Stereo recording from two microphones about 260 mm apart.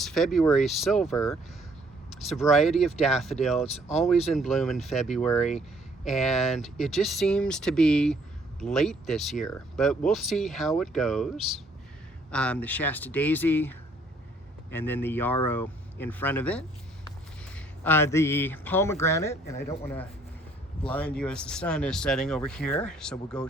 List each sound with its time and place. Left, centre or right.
0.0 s speech: centre
12.3 s speech: centre